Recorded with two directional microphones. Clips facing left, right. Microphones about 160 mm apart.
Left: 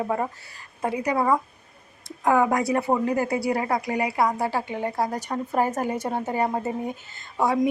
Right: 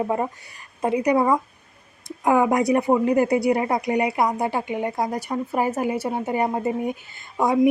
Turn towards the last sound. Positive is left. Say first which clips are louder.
# right 3 dB
turn(degrees=-15)  # may be behind; listen again after turning